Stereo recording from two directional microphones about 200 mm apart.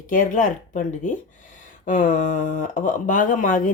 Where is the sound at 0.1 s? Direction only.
40° left (ahead or behind).